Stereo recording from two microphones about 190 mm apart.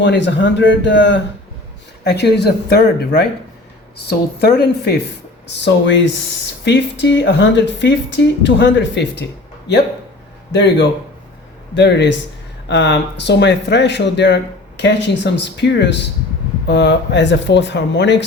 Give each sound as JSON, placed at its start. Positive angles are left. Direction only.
{"t": 0.0, "sound": "speech", "side_deg": 65}
{"t": 2.0, "sound": "speech", "side_deg": 60}
{"t": 5.5, "sound": "speech", "side_deg": 70}
{"t": 10.5, "sound": "speech", "side_deg": 65}